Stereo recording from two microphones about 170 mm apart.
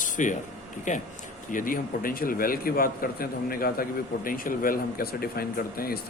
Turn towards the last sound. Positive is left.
turn(degrees=60)  # may be behind; listen again after turning